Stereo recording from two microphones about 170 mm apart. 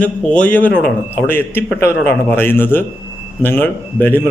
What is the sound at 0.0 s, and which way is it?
A man's voice, 10° left (ahead or behind).